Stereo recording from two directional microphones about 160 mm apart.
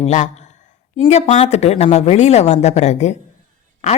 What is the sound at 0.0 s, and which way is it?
Speech, 50° left (ahead or behind).